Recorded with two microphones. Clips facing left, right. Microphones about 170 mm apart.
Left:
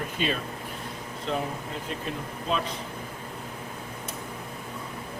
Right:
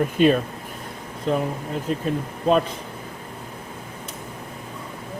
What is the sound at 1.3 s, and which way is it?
Speech, 45° right (ahead or behind).